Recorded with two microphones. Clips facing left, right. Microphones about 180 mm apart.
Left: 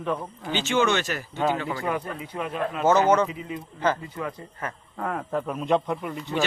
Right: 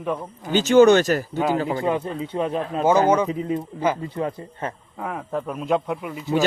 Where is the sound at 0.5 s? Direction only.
40° right (ahead or behind).